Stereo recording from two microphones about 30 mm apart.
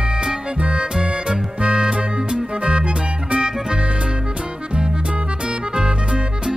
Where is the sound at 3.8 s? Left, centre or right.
Right.